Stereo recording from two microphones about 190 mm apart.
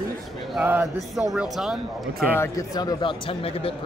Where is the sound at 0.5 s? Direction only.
10° right (ahead or behind).